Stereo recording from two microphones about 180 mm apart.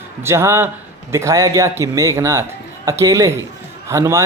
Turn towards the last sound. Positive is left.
turn(degrees=-15)  # may be behind; listen again after turning